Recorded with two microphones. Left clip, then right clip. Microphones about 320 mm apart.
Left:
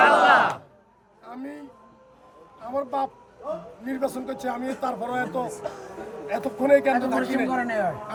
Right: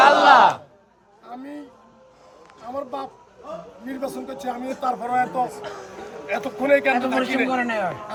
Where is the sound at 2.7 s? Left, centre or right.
Centre.